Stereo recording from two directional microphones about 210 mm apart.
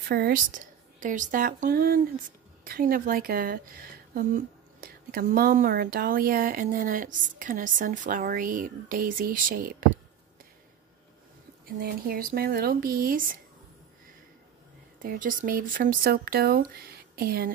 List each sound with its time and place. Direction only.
0.1 s a woman's voice: 45° right (ahead or behind)
11.6 s a woman's voice: 45° right (ahead or behind)
15.0 s a woman's voice: 40° right (ahead or behind)